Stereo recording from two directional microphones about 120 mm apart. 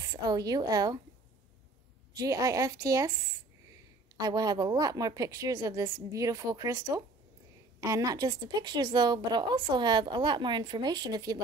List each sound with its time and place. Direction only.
0.2 s a woman's voice: 30° right (ahead or behind)
2.1 s a woman's voice: 30° right (ahead or behind)
4.2 s a woman's voice: 30° right (ahead or behind)